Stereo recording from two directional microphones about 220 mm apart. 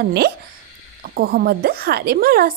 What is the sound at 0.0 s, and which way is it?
Speech, 45° right (ahead or behind).